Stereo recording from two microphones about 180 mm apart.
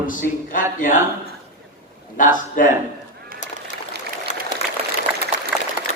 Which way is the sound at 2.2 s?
45° left (ahead or behind).